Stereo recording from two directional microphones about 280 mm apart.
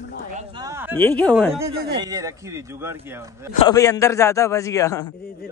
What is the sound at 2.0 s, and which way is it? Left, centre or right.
A man's voice, centre.